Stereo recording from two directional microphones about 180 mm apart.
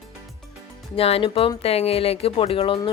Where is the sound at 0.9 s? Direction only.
30° left (ahead or behind).